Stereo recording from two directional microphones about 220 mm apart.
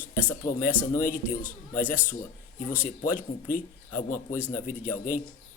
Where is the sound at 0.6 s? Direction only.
35° left (ahead or behind).